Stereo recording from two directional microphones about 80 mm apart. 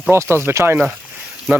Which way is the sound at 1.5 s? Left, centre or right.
Centre.